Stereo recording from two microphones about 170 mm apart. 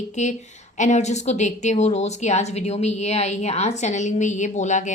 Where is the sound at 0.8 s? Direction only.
45° left (ahead or behind).